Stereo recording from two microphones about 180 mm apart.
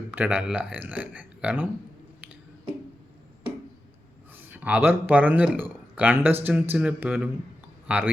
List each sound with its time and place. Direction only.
0.1 s speech: 10° right (ahead or behind)
4.4 s speech: 10° right (ahead or behind)